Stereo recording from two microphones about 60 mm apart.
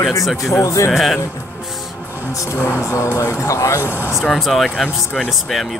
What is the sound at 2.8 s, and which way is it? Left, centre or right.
Speech, left.